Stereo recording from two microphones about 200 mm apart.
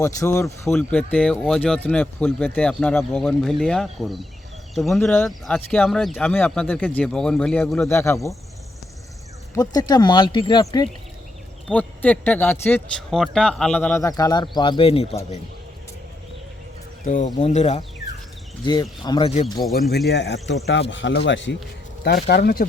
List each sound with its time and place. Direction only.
0.0 s speech: 15° left (ahead or behind)
9.6 s speech: 20° left (ahead or behind)
11.7 s speech: 5° left (ahead or behind); by 15.4 s 30° left (ahead or behind)
17.0 s speech: 40° left (ahead or behind)
18.6 s speech: 20° left (ahead or behind)
20.1 s speech: 60° left (ahead or behind)
22.0 s speech: 55° left (ahead or behind)